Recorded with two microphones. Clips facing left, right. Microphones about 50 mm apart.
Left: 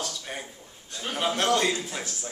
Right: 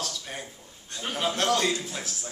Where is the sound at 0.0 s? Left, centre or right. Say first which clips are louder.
Left 1 dB; centre.